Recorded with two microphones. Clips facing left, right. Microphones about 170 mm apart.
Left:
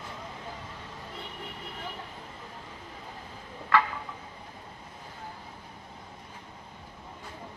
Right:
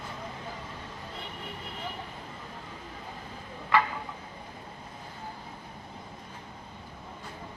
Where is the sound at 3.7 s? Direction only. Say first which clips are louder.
Even; 15° right (ahead or behind).